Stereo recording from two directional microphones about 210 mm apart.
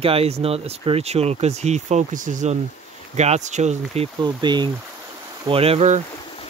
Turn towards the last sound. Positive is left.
turn(degrees=-30)  # may be behind; listen again after turning